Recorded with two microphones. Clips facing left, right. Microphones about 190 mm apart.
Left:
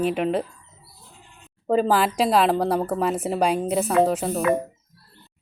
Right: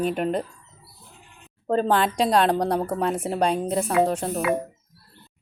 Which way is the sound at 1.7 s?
5° left (ahead or behind).